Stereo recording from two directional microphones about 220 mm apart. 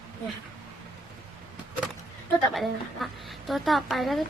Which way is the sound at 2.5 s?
Centre (ahead or behind).